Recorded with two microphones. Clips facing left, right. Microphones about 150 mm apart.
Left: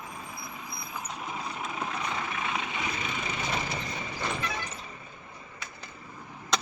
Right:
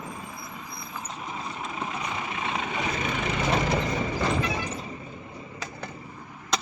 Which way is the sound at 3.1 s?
60° right (ahead or behind).